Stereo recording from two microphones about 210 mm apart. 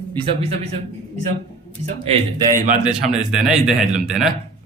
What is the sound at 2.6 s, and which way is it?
Speech, 40° right (ahead or behind).